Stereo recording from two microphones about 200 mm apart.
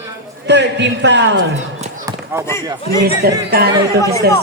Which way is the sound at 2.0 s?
15° right (ahead or behind).